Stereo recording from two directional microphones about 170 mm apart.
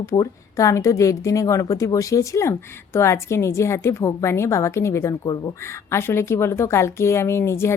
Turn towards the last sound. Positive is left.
turn(degrees=15)  # may be behind; listen again after turning